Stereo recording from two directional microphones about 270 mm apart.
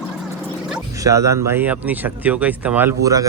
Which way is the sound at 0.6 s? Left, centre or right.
Centre.